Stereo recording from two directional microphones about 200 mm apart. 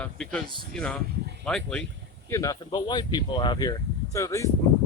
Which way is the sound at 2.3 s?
15° left (ahead or behind).